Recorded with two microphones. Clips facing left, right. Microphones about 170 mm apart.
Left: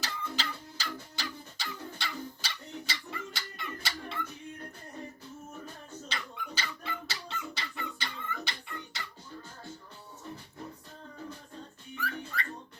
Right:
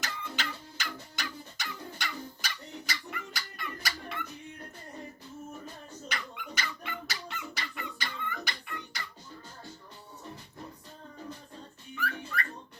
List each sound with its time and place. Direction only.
0.0 s bird: 30° left (ahead or behind)
6.1 s dog: 30° left (ahead or behind)
11.9 s whistling: 25° left (ahead or behind)